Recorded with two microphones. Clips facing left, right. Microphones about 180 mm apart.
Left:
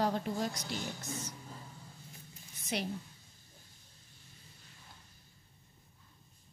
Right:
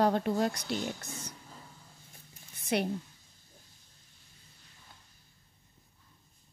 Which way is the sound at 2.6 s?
60° right (ahead or behind).